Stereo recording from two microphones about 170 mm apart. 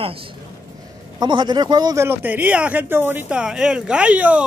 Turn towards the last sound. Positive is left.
turn(degrees=-5)  # may be behind; listen again after turning